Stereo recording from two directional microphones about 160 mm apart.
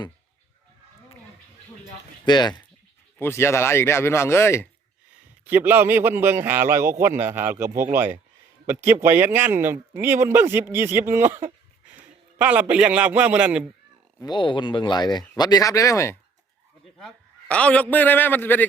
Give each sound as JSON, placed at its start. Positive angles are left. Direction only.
{"t": 2.2, "sound": "speech", "side_deg": 25}
{"t": 3.2, "sound": "speech", "side_deg": 15}
{"t": 5.5, "sound": "speech", "side_deg": -10}
{"t": 14.2, "sound": "speech", "side_deg": 30}
{"t": 17.5, "sound": "speech", "side_deg": 5}